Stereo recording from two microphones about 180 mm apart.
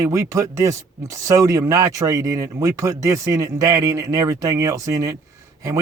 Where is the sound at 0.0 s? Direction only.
15° right (ahead or behind).